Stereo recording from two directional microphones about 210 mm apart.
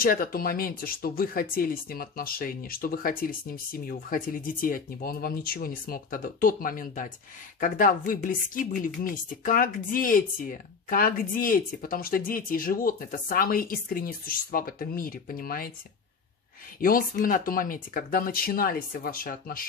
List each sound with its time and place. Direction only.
0.0 s speech: 45° left (ahead or behind)
16.8 s speech: 40° left (ahead or behind)